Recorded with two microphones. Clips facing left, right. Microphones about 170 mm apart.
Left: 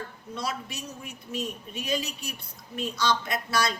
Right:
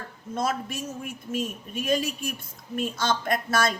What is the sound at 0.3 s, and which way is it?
Speech, 50° right (ahead or behind).